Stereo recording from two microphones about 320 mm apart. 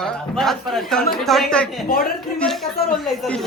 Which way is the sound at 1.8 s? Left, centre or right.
Left.